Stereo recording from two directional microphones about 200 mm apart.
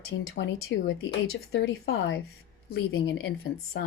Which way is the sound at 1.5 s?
60° left (ahead or behind).